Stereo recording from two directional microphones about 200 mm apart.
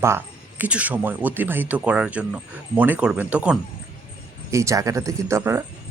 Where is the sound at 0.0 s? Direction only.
10° right (ahead or behind).